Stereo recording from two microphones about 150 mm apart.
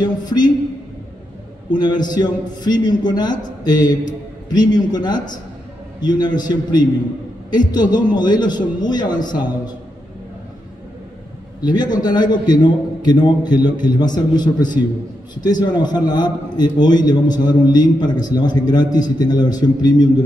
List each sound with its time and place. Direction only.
0.0 s a man's voice: 30° left (ahead or behind)
1.7 s a man's voice: 30° left (ahead or behind)
11.6 s a man's voice: 30° left (ahead or behind)